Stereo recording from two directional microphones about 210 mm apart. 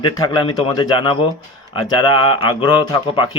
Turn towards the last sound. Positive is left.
turn(degrees=20)  # may be behind; listen again after turning